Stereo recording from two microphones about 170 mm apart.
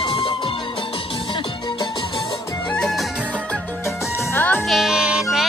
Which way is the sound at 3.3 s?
5° left (ahead or behind).